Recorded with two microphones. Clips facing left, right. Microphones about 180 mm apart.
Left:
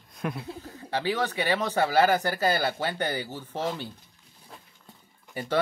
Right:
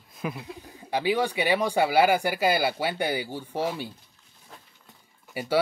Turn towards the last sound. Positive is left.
turn(degrees=-10)  # may be behind; listen again after turning